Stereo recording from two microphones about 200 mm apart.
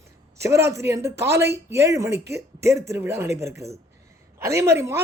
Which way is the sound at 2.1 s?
55° right (ahead or behind).